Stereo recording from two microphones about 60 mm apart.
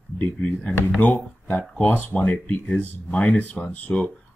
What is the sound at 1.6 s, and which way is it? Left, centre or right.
Speech, left.